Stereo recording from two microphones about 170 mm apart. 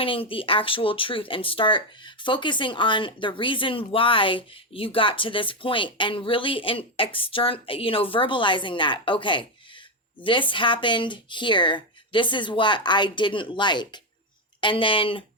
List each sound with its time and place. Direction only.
0.0 s speech: 30° left (ahead or behind)